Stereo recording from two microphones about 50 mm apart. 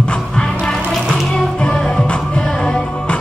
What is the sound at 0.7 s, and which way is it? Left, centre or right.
Music, centre.